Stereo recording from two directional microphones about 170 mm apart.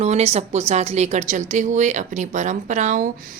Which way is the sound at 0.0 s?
40° right (ahead or behind).